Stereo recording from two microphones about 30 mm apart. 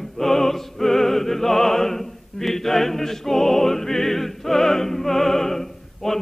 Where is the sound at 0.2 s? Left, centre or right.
Centre.